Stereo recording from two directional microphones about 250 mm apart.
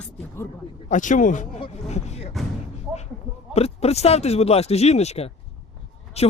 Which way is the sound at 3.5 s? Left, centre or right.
Left.